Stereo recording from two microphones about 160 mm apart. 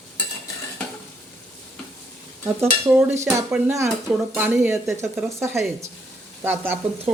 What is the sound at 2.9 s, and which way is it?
Speech, 15° right (ahead or behind).